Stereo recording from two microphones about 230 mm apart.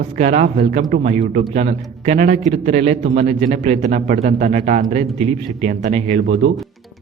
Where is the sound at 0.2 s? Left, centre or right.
Right.